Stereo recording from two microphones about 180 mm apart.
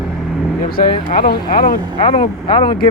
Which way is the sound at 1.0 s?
55° left (ahead or behind).